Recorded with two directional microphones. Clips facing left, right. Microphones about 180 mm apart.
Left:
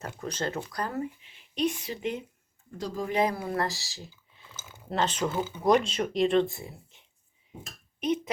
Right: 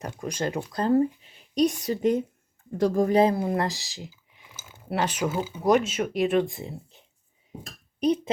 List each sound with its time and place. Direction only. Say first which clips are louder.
0.0 s speech: right 3 dB; 15° right (ahead or behind); by 2.2 s 40° right (ahead or behind)
2.7 s speech: right 10 dB; 55° right (ahead or behind)
3.2 s speech: right 2 dB; 25° right (ahead or behind)
7.6 s speech: right 8 dB; 35° right (ahead or behind)